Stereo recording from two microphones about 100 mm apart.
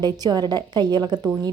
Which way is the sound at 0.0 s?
45° right (ahead or behind).